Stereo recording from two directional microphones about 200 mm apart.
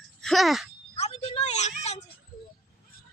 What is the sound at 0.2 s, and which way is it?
Speech, centre (ahead or behind).